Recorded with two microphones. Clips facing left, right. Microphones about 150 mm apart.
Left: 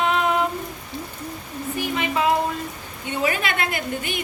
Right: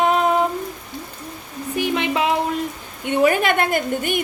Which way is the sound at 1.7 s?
90° right.